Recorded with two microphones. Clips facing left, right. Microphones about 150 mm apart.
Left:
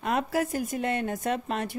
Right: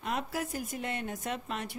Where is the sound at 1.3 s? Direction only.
45° left (ahead or behind).